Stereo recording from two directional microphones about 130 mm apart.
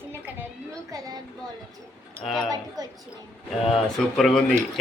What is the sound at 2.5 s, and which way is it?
Speech, 30° right (ahead or behind).